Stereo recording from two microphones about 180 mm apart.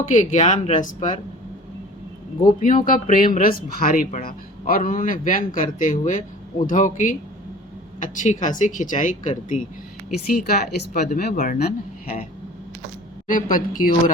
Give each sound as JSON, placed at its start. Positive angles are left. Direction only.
{"t": 0.0, "sound": "a man's voice", "side_deg": 40}
{"t": 2.6, "sound": "a man's voice", "side_deg": 45}
{"t": 10.2, "sound": "speech", "side_deg": 60}
{"t": 11.3, "sound": "speech", "side_deg": 40}
{"t": 13.2, "sound": "a man's voice", "side_deg": 50}